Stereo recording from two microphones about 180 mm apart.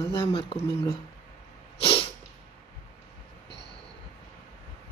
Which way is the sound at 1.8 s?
30° left (ahead or behind).